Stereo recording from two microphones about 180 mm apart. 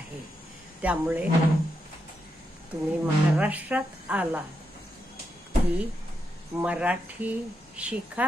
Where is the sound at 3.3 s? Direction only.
10° right (ahead or behind).